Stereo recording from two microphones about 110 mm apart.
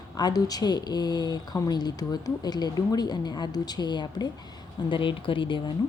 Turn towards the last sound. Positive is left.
turn(degrees=50)  # may be behind; listen again after turning